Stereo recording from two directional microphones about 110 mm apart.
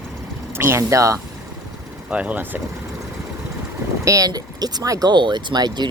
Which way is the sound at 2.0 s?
10° right (ahead or behind).